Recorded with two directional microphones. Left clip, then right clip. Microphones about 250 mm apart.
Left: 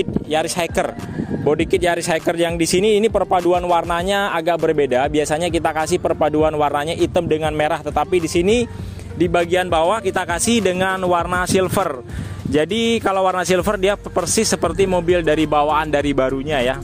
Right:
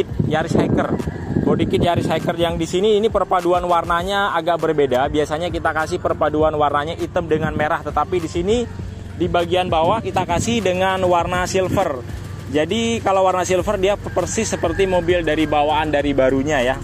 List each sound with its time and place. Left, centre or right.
0.3 s speech: left